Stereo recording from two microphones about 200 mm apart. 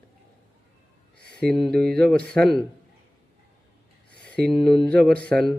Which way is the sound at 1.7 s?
5° left (ahead or behind).